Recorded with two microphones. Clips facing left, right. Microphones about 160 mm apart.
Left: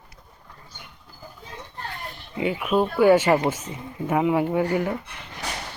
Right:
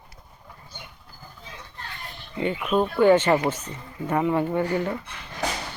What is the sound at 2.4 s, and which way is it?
Speech, 5° left (ahead or behind).